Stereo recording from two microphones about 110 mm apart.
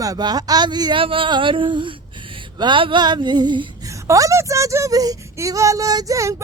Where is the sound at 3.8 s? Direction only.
30° right (ahead or behind).